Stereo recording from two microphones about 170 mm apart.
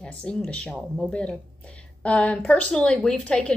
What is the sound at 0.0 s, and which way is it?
Speech, 5° left (ahead or behind).